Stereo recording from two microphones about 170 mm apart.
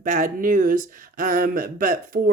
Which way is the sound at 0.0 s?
50° right (ahead or behind).